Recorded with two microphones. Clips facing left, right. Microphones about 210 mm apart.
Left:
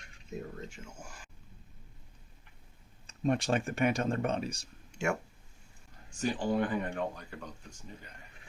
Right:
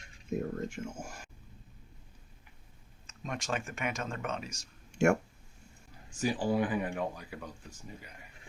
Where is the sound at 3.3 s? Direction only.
35° left (ahead or behind).